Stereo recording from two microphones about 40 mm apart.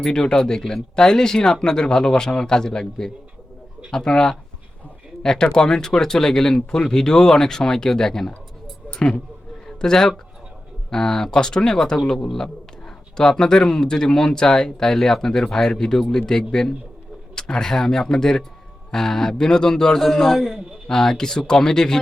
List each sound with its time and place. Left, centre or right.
0.0 s speech: centre
8.9 s speech: left
9.6 s speech: centre